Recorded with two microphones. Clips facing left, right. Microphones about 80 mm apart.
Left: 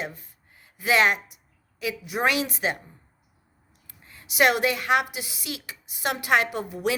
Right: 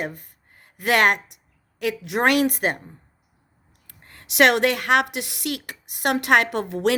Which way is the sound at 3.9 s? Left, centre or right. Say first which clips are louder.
Right 2 dB; right.